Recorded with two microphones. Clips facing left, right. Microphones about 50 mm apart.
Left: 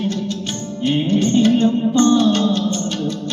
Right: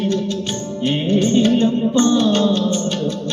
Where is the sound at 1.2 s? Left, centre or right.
Right.